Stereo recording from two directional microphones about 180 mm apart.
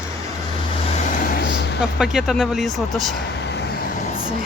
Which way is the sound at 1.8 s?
5° right (ahead or behind).